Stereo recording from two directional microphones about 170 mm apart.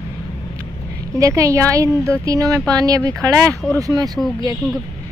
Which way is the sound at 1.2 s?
20° right (ahead or behind).